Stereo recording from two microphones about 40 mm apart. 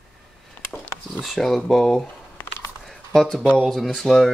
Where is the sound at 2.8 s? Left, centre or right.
Centre.